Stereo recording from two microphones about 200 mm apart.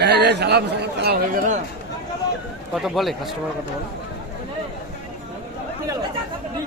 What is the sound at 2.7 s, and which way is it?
Speech, centre (ahead or behind).